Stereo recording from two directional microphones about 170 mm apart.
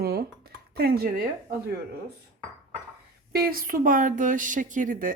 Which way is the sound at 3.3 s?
60° right (ahead or behind).